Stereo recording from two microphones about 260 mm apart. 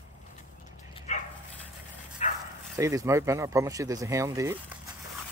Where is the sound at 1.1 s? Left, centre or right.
Left.